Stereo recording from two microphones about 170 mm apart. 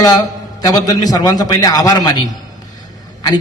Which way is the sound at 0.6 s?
20° left (ahead or behind).